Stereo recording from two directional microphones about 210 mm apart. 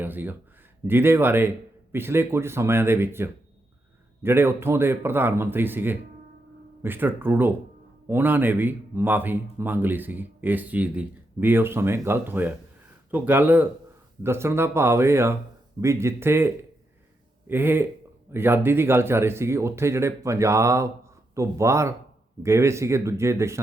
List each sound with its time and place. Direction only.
0.0 s speech: 10° right (ahead or behind)
17.5 s speech: 10° right (ahead or behind)